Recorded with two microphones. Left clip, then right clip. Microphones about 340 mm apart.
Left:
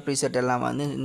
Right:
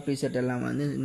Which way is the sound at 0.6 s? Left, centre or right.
Centre.